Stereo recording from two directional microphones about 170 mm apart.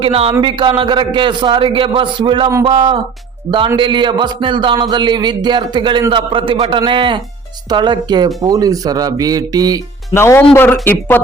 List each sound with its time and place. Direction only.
0.0 s speech: 35° right (ahead or behind)
10.1 s speech: 15° left (ahead or behind)